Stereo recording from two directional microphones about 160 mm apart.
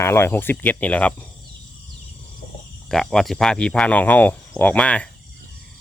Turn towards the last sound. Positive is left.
turn(degrees=5)  # may be behind; listen again after turning